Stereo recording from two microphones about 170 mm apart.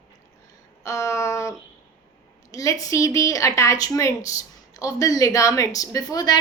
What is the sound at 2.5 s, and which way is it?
A woman's voice, 20° left (ahead or behind).